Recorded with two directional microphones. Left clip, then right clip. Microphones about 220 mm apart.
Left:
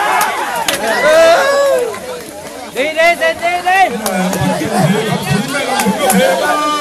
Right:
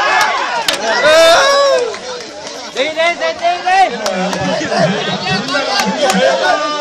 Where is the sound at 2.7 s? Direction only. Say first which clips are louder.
Left 3 dB; 20° left (ahead or behind).